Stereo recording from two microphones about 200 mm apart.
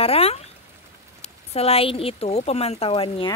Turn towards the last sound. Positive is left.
turn(degrees=25)  # may be behind; listen again after turning